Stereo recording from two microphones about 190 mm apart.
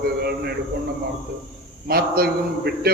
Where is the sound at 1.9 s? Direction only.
55° right (ahead or behind).